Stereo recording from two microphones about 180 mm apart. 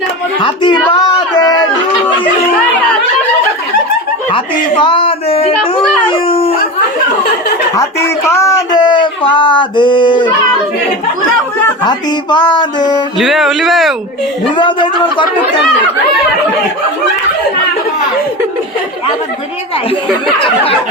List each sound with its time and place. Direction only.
0.4 s male singing: 25° left (ahead or behind)
0.9 s a sound: 20° left (ahead or behind)
4.8 s child singing: 30° left (ahead or behind)
6.1 s howl: 30° left (ahead or behind)
8.3 s male singing: 15° left (ahead or behind)
11.8 s male singing: 25° left (ahead or behind)
13.1 s speech: centre (ahead or behind)
14.5 s male singing: 25° left (ahead or behind)